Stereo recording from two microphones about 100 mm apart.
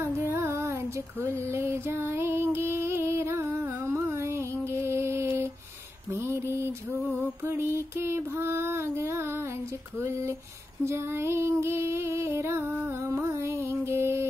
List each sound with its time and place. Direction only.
0.0 s music: 20° right (ahead or behind)
6.1 s a sound: 25° right (ahead or behind)
7.4 s music: 25° right (ahead or behind)
7.9 s female singing: 25° right (ahead or behind)
9.9 s speech: 25° right (ahead or behind)
10.9 s music: 25° right (ahead or behind)